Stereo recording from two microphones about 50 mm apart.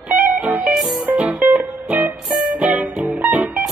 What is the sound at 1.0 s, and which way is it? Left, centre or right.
Music, right.